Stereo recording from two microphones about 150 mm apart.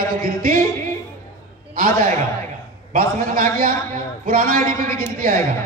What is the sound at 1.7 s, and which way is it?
A man's voice, 70° right (ahead or behind).